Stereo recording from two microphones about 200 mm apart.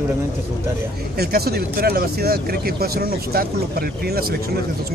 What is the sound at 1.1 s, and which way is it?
Speech, 50° right (ahead or behind).